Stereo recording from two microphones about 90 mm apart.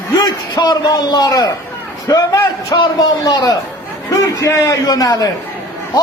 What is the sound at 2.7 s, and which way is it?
A man's voice, 55° left (ahead or behind).